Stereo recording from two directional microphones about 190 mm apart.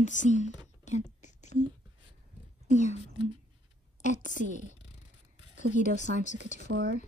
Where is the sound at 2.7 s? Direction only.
40° left (ahead or behind).